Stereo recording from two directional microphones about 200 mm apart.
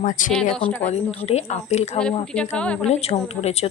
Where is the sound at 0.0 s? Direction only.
40° left (ahead or behind).